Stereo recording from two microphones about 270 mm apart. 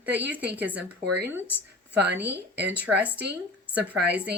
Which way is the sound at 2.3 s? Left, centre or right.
Right.